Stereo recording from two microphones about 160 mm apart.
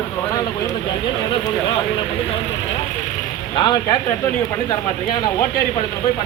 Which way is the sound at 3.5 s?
30° left (ahead or behind).